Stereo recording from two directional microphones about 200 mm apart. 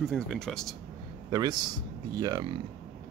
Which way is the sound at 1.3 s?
20° right (ahead or behind).